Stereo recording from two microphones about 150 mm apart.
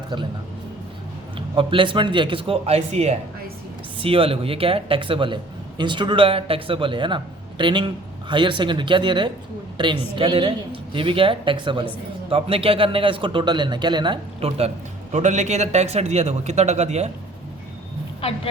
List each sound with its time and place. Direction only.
1.4 s speech: 35° right (ahead or behind)
15.1 s a man's voice: 50° right (ahead or behind)